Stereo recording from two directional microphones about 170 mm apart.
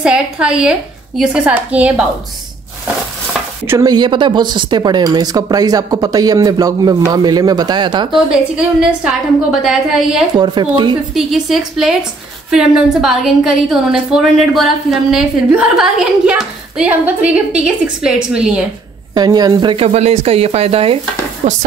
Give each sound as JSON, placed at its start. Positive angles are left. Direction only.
{"t": 0.0, "sound": "a woman's voice", "side_deg": -5}
{"t": 3.6, "sound": "speech", "side_deg": -20}
{"t": 8.3, "sound": "a woman's voice", "side_deg": -5}
{"t": 10.3, "sound": "speech", "side_deg": -25}
{"t": 11.1, "sound": "a woman's voice", "side_deg": 0}
{"t": 19.1, "sound": "speech", "side_deg": -25}